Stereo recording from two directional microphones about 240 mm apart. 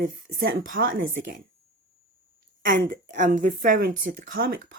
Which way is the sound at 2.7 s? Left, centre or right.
Right.